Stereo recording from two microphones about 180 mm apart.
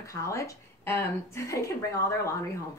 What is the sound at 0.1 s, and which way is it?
A woman's voice, 15° left (ahead or behind).